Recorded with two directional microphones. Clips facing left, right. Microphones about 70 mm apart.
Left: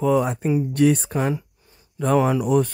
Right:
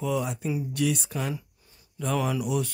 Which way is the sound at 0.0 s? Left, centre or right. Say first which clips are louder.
Left 9 dB; left.